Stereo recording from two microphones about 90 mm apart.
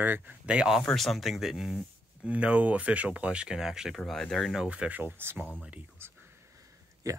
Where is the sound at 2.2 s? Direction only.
15° right (ahead or behind).